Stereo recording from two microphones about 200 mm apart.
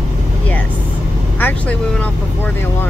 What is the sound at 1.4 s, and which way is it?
Vehicle, 10° left (ahead or behind).